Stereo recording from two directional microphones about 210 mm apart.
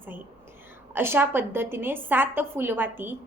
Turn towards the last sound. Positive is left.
turn(degrees=-10)  # may be behind; listen again after turning